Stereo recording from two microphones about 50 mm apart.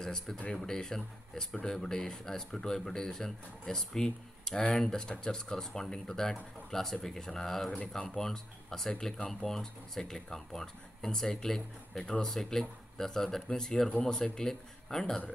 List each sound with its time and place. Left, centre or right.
0.0 s speech: centre
12.0 s speech: centre
12.3 s speech: centre